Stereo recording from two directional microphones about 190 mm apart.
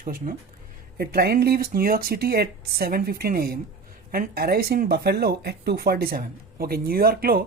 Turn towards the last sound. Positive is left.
turn(degrees=-50)  # may be behind; listen again after turning